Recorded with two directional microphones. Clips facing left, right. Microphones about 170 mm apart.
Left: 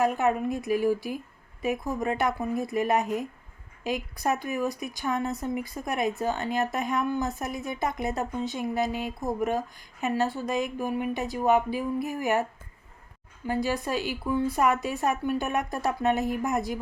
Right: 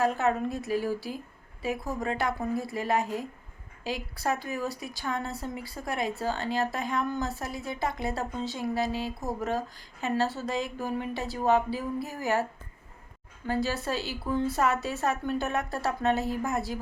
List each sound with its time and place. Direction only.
0.0 s speech: 15° left (ahead or behind)
13.5 s speech: 15° left (ahead or behind)